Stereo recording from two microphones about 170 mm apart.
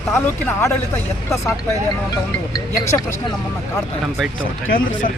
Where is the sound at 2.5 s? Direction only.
20° left (ahead or behind).